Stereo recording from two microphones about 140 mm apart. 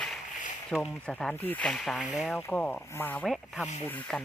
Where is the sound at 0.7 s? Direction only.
5° left (ahead or behind).